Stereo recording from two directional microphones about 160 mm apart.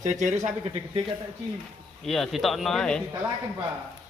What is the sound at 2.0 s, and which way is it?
Speech, centre (ahead or behind).